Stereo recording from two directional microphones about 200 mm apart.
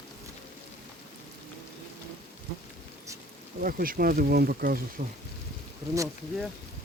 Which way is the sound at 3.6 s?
45° right (ahead or behind).